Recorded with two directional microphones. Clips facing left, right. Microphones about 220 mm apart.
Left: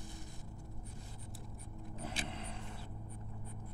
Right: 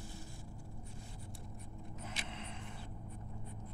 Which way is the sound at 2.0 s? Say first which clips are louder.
Left 5 dB; 35° left (ahead or behind).